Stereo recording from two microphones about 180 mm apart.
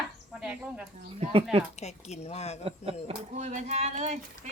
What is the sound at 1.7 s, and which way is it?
Speech, 35° left (ahead or behind).